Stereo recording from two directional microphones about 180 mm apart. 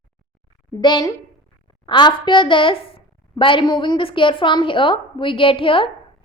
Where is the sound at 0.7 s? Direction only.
25° left (ahead or behind).